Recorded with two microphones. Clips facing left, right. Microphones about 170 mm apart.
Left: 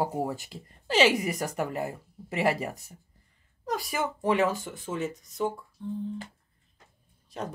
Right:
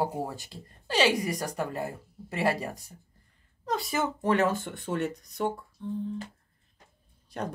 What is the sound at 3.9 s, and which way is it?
Speech, 10° left (ahead or behind).